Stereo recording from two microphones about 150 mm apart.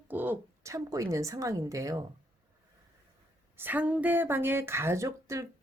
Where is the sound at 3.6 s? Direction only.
10° right (ahead or behind).